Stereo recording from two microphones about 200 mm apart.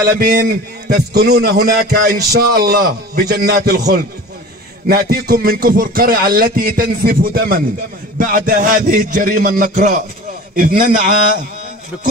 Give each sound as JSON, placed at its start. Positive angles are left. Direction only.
{"t": 0.0, "sound": "a man's voice", "side_deg": -45}